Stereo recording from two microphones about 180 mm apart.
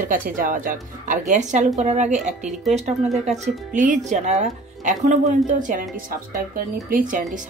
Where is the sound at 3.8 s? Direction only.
45° right (ahead or behind).